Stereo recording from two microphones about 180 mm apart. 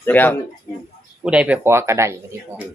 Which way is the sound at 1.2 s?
5° right (ahead or behind).